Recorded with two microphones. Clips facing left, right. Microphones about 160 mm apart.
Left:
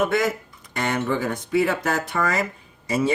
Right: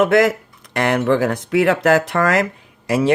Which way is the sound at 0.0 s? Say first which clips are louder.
Right 7 dB; 75° right (ahead or behind).